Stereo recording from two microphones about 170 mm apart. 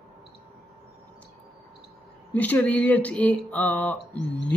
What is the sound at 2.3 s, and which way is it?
Speech, 10° left (ahead or behind).